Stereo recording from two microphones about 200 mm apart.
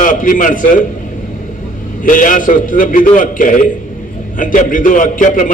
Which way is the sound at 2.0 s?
40° left (ahead or behind).